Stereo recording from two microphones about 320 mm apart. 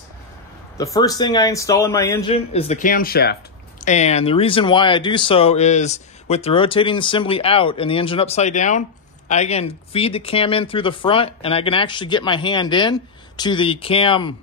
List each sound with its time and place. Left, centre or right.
0.9 s speech: centre